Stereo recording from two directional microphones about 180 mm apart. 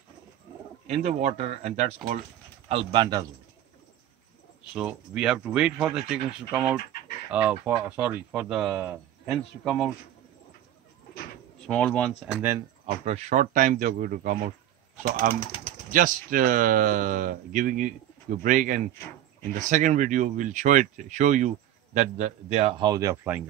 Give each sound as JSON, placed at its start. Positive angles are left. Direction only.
{"t": 0.8, "sound": "a man's voice", "side_deg": -40}
{"t": 2.7, "sound": "a man's voice", "side_deg": -25}
{"t": 4.7, "sound": "speech", "side_deg": -5}
{"t": 11.6, "sound": "speech", "side_deg": 5}
{"t": 12.3, "sound": "speech", "side_deg": -5}
{"t": 13.0, "sound": "speech", "side_deg": -40}
{"t": 15.9, "sound": "a man's voice", "side_deg": -50}